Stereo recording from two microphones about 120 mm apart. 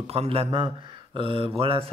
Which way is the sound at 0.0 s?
55° right (ahead or behind).